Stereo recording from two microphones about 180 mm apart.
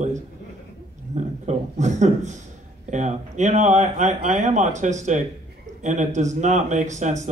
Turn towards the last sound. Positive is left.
turn(degrees=-40)  # may be behind; listen again after turning